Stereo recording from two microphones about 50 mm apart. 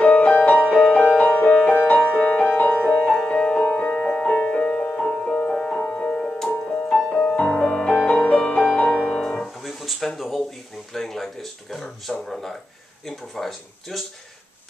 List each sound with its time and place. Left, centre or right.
0.0 s music: left
9.6 s a sound: centre
13.0 s speech: centre